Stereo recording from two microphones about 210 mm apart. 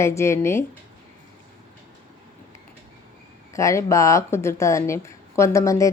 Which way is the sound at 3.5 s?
15° left (ahead or behind).